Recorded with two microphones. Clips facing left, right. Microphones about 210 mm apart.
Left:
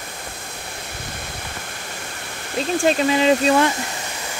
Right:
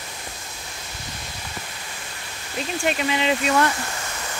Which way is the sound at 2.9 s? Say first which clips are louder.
Left 6 dB; 35° left (ahead or behind).